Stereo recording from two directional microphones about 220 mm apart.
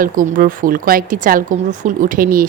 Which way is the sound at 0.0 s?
40° right (ahead or behind).